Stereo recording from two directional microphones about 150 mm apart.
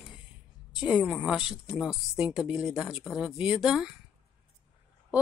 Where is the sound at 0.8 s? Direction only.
5° right (ahead or behind).